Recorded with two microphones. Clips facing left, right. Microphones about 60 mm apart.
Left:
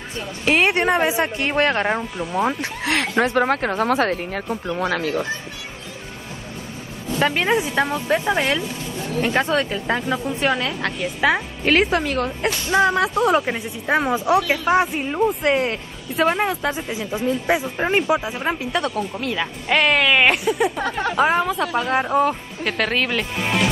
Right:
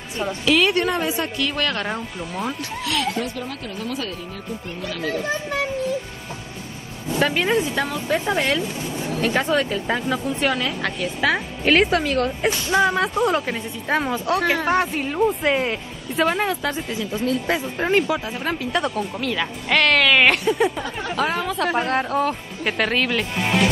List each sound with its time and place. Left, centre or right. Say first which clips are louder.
0.5 s speech: left 2 dB; left
3.3 s a woman's voice: left 11 dB; left
7.2 s speech: left 1 dB; centre
7.4 s speech: left 2 dB; centre
8.3 s speech: left 1 dB; centre
18.7 s speech: even; centre
21.2 s speech: left 3 dB; centre